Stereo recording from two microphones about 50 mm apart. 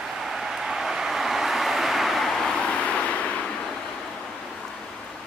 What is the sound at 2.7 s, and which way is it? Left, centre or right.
Vehicle, left.